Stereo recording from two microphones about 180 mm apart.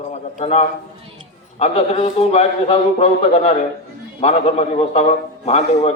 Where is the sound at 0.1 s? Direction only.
35° left (ahead or behind).